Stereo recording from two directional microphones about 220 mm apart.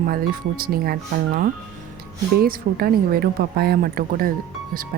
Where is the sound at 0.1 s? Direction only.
40° right (ahead or behind).